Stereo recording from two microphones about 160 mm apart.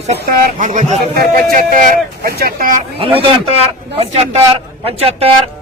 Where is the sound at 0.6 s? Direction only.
50° right (ahead or behind); by 2.7 s 65° right (ahead or behind).